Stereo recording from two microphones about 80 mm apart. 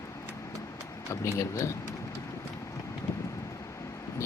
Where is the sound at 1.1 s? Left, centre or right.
Left.